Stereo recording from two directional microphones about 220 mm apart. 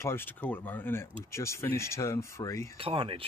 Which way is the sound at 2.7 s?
25° right (ahead or behind).